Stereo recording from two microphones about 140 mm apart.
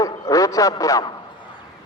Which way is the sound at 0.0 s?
25° left (ahead or behind).